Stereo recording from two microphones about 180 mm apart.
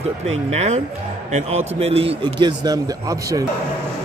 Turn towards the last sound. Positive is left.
turn(degrees=-20)  # may be behind; listen again after turning